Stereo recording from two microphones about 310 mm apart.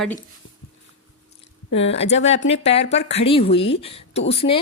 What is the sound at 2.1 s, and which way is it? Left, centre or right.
Speech, left.